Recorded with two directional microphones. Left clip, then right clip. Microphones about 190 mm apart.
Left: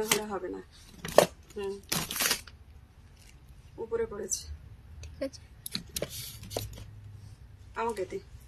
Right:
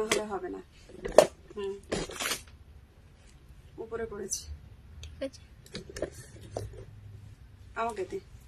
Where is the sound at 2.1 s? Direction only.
55° left (ahead or behind).